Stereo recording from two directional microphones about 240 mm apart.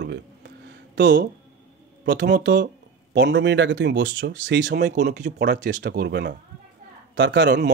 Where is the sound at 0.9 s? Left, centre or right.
Right.